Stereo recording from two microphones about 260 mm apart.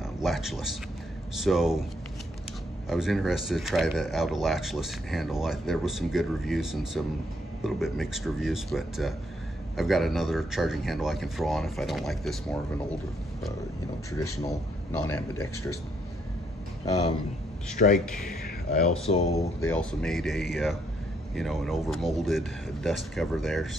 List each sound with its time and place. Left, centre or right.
0.0 s a man's voice: centre
2.9 s speech: centre
14.2 s speech: centre
17.7 s a man's voice: left
19.0 s speech: left
19.7 s speech: centre